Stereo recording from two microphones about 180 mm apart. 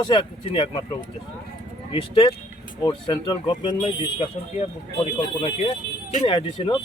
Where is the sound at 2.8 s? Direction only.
25° left (ahead or behind).